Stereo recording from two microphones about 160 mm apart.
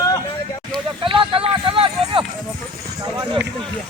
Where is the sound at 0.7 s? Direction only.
30° right (ahead or behind).